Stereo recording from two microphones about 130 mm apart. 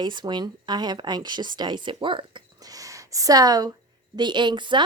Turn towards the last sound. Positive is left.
turn(degrees=-35)  # may be behind; listen again after turning